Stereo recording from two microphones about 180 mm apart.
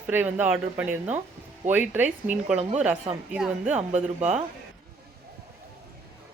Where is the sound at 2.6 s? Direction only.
40° right (ahead or behind).